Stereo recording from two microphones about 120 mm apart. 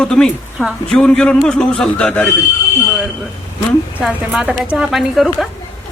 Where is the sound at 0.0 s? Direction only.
5° left (ahead or behind).